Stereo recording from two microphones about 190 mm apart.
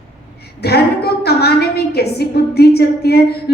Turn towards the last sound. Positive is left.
turn(degrees=55)  # may be behind; listen again after turning